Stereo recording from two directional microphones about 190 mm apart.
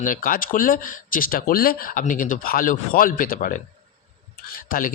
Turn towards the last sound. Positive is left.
turn(degrees=45)  # may be behind; listen again after turning